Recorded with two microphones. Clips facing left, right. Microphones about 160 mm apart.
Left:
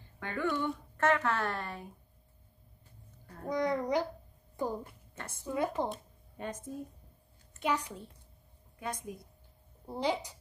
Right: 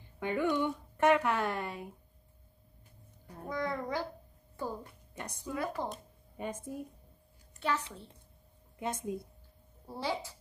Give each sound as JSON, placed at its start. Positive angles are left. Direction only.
{"t": 0.2, "sound": "speech", "side_deg": -15}
{"t": 3.4, "sound": "a child's voice", "side_deg": 20}
{"t": 5.1, "sound": "a woman's voice", "side_deg": -15}
{"t": 5.5, "sound": "a child's voice", "side_deg": 20}
{"t": 5.9, "sound": "a woman's voice", "side_deg": -10}
{"t": 7.6, "sound": "a woman's voice", "side_deg": 15}
{"t": 8.7, "sound": "a woman's voice", "side_deg": -25}
{"t": 9.8, "sound": "a woman's voice", "side_deg": 20}